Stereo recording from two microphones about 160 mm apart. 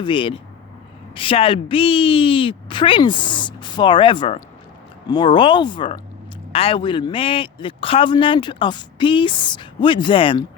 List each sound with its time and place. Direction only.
0.0 s a man's voice: 30° left (ahead or behind)